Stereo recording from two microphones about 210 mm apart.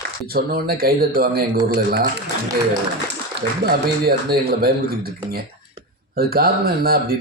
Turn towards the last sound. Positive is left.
turn(degrees=-45)  # may be behind; listen again after turning